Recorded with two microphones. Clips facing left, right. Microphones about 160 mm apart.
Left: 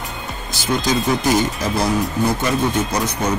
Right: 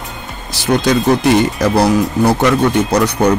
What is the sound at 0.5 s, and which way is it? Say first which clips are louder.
Speech: right 6 dB; 70° right (ahead or behind).